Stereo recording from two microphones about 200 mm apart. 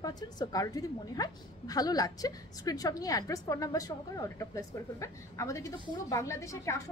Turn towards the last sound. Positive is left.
turn(degrees=15)  # may be behind; listen again after turning